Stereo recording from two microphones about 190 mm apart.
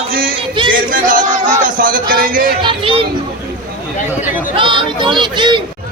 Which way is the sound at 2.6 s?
25° right (ahead or behind).